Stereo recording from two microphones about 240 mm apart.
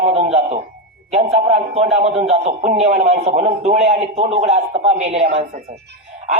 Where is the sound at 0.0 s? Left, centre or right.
Right.